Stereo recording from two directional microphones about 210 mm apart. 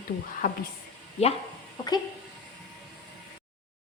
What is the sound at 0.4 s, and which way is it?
Speech, 40° left (ahead or behind).